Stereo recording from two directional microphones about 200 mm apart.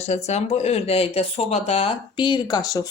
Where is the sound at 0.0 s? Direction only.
35° left (ahead or behind).